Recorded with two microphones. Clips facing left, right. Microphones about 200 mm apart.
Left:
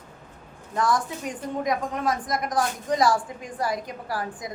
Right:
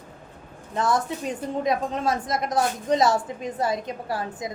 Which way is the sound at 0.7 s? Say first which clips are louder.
Right 1 dB; 25° right (ahead or behind).